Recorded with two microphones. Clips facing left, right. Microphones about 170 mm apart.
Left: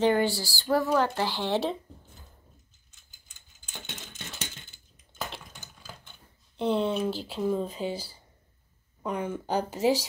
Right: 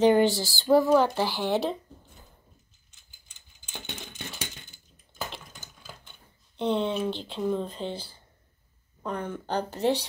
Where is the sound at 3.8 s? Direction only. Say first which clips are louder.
Right 5 dB; 15° right (ahead or behind).